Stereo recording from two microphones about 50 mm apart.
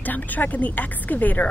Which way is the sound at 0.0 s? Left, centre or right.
Left.